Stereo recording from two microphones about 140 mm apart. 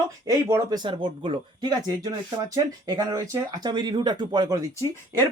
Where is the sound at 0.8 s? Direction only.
35° right (ahead or behind).